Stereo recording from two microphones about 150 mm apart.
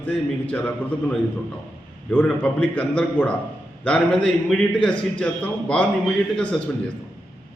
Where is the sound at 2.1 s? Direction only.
10° left (ahead or behind).